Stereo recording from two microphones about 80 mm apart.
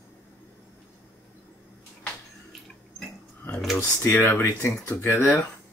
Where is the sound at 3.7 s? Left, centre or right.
Left.